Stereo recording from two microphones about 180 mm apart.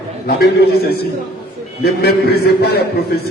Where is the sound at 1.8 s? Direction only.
60° left (ahead or behind).